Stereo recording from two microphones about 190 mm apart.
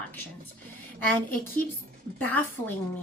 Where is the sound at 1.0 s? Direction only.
10° left (ahead or behind).